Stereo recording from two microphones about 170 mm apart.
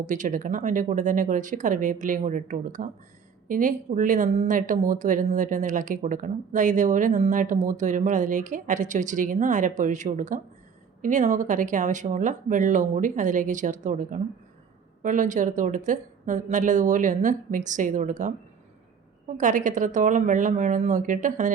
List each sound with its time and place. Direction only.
0.0 s speech: 50° right (ahead or behind)
19.4 s speech: 50° right (ahead or behind)